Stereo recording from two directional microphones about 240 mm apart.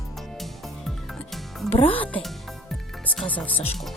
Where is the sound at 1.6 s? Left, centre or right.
Left.